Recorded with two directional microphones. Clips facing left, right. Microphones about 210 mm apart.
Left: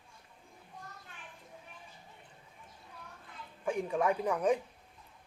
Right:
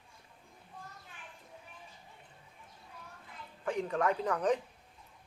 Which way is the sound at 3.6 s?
10° left (ahead or behind).